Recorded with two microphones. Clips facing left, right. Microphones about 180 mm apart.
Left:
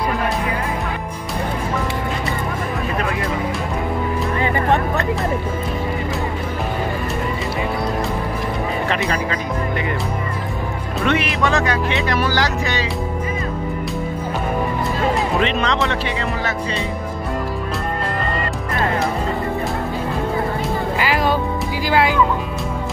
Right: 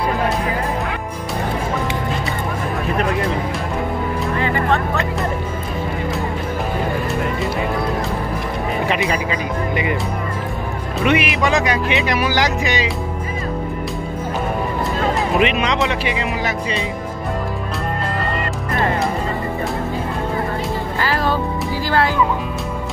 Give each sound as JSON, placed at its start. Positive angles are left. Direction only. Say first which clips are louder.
{"t": 9.1, "sound": "music", "louder": "right 1 dB", "side_deg": -10}
{"t": 11.1, "sound": "speech", "louder": "right 2 dB", "side_deg": -10}
{"t": 15.3, "sound": "speech", "louder": "right 2 dB", "side_deg": -10}
{"t": 21.0, "sound": "music", "louder": "even", "side_deg": 15}
{"t": 21.8, "sound": "speech", "louder": "left 2 dB", "side_deg": 10}